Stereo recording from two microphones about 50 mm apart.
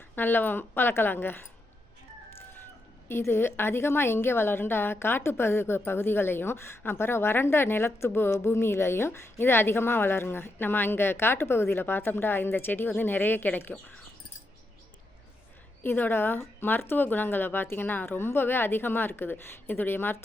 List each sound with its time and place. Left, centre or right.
0.2 s a woman's voice: left
3.1 s a woman's voice: left
15.8 s a woman's voice: left